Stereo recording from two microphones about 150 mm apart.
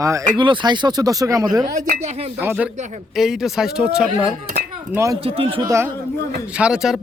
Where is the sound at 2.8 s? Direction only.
50° right (ahead or behind).